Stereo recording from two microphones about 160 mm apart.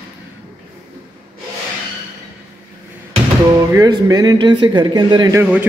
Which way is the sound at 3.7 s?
20° right (ahead or behind).